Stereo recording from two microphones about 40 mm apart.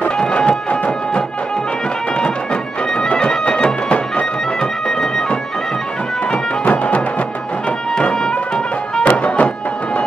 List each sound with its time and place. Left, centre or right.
0.2 s a sound: left
2.1 s music: left
4.6 s music: centre
6.6 s music: left
8.1 s music: left
9.1 s music: left